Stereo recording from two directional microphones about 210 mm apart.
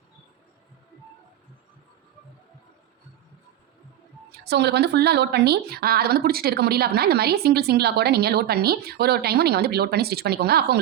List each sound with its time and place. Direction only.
4.4 s a woman's voice: 50° right (ahead or behind)